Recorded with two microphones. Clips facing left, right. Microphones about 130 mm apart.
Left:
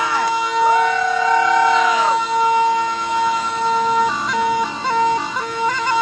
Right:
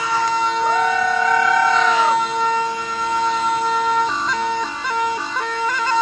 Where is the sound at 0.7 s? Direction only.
5° left (ahead or behind).